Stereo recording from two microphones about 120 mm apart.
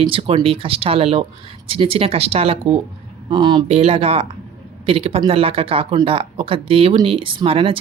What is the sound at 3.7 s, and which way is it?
Speech, 55° right (ahead or behind).